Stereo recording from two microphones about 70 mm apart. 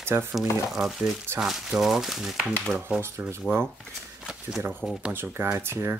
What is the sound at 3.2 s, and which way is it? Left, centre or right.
Speech, right.